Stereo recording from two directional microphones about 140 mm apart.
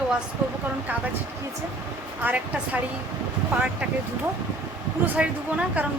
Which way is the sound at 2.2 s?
10° right (ahead or behind).